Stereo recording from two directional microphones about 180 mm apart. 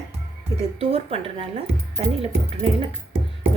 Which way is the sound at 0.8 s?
35° right (ahead or behind).